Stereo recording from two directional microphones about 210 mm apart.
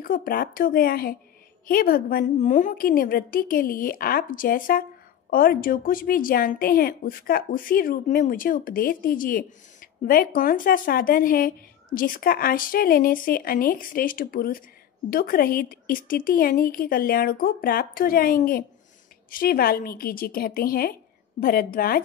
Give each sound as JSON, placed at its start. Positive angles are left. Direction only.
{"t": 0.0, "sound": "a woman's voice", "side_deg": 40}